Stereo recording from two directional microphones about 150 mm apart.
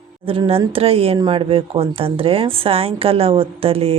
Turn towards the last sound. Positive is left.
turn(degrees=-40)  # may be behind; listen again after turning